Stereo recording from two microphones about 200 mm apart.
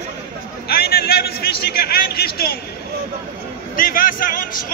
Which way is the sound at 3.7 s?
45° left (ahead or behind).